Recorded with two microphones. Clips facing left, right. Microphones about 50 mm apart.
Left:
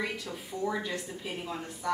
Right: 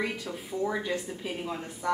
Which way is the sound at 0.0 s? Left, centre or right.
Centre.